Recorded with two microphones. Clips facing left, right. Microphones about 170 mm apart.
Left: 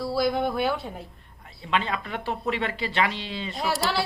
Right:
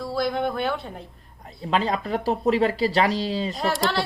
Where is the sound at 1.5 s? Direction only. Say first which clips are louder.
Right 4 dB; 40° right (ahead or behind).